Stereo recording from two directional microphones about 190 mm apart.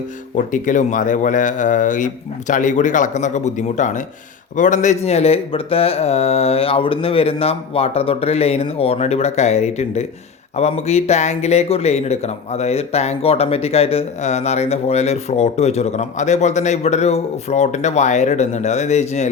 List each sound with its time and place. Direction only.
0.3 s speech: 40° left (ahead or behind)